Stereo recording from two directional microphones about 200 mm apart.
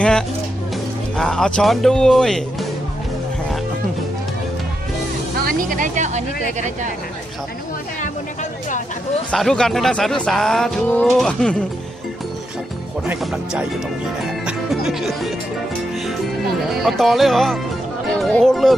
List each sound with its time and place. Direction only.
0.0 s music: 5° left (ahead or behind)
1.1 s speech: 5° left (ahead or behind)
5.5 s speech: 45° right (ahead or behind)
9.3 s speech: 5° left (ahead or behind)
13.1 s speech: 5° right (ahead or behind)
14.4 s music: centre (ahead or behind)
16.6 s speech: centre (ahead or behind)